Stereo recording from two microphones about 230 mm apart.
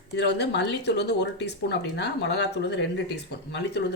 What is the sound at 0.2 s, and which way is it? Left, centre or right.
Speech, left.